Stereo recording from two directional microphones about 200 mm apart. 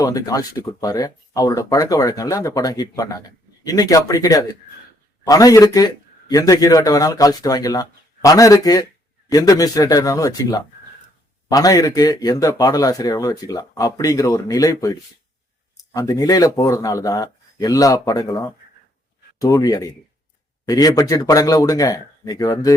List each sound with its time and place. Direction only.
0.0 s speech: 20° left (ahead or behind)